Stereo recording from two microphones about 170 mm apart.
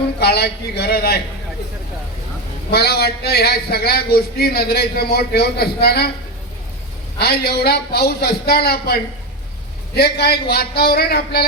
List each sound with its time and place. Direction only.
0.2 s a man's voice: 70° left (ahead or behind)
2.7 s a man's voice: 70° left (ahead or behind)
7.2 s a man's voice: 70° left (ahead or behind)